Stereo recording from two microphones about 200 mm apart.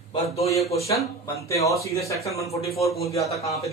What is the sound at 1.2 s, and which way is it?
Speech, 15° left (ahead or behind).